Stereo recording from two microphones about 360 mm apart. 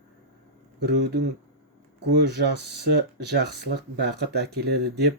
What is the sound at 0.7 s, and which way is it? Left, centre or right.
Speech, right.